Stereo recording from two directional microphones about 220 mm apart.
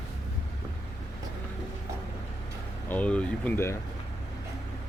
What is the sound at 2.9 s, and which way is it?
Speech, 5° left (ahead or behind).